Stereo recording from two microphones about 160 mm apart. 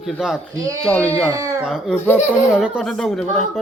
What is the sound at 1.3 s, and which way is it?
Speech, 20° right (ahead or behind).